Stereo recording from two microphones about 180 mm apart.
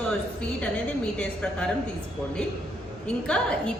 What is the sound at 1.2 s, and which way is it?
Speech, 5° left (ahead or behind).